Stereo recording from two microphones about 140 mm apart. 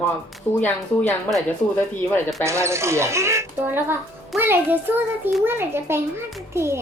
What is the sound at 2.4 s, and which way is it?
Speech, 20° right (ahead or behind).